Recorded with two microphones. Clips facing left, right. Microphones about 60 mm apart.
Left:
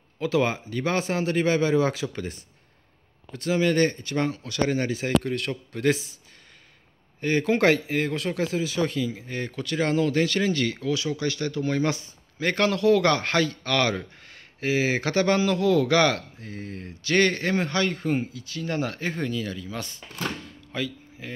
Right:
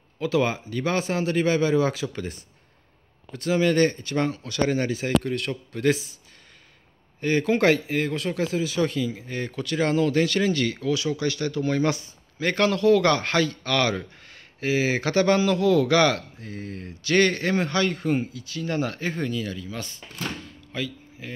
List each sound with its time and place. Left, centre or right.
0.2 s a man's voice: left
3.3 s speech: centre
4.9 s a man's voice: left
7.2 s speech: centre
7.5 s speech: left
8.8 s speech: centre
9.3 s speech: left
12.4 s a man's voice: left
15.6 s a man's voice: left
19.8 s a man's voice: left